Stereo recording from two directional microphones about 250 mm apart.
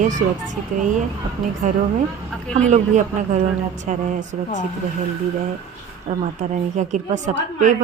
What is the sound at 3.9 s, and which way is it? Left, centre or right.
Speech, right.